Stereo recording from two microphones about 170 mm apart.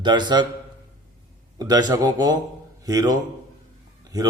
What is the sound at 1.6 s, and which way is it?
A man's voice, 25° right (ahead or behind).